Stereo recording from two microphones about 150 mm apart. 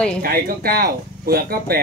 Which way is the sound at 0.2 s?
85° right.